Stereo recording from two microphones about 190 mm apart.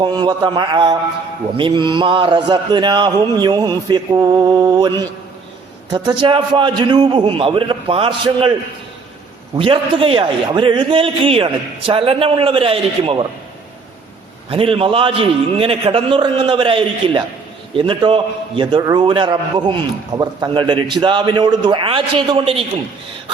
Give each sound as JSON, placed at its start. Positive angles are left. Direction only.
{"t": 0.0, "sound": "a man's voice", "side_deg": -20}
{"t": 9.6, "sound": "a man's voice", "side_deg": -30}
{"t": 14.5, "sound": "a man's voice", "side_deg": -30}